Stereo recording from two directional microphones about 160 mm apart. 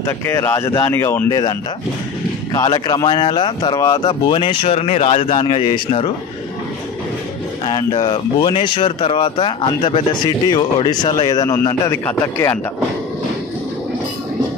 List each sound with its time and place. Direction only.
0.0 s speech: 15° left (ahead or behind)
2.5 s speech: 25° left (ahead or behind)
7.9 s speech: 30° left (ahead or behind)